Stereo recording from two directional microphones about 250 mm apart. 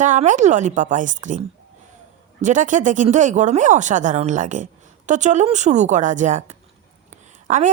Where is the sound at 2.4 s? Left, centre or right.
Right.